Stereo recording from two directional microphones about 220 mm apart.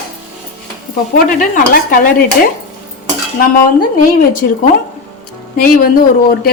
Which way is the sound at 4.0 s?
40° left (ahead or behind).